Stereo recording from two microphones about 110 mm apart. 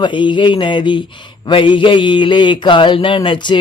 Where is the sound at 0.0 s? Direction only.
45° left (ahead or behind).